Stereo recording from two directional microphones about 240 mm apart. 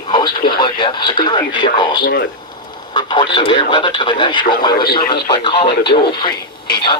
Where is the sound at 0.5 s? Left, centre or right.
Centre.